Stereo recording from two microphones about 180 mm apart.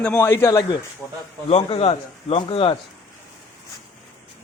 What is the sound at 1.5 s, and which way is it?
Speech, 35° left (ahead or behind).